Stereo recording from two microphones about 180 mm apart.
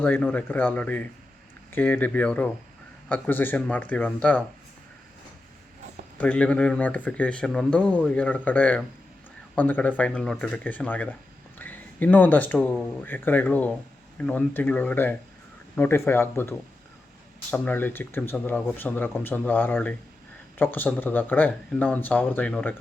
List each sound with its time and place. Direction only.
0.0 s speech: 10° left (ahead or behind)
6.1 s speech: 5° left (ahead or behind)